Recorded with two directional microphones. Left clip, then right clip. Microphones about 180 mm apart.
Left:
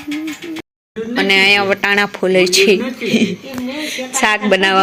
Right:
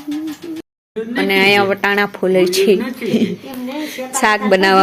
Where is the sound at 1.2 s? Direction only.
Centre (ahead or behind).